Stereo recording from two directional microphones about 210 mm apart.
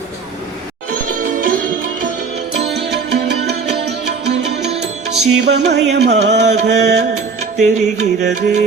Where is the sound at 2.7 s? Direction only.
55° right (ahead or behind).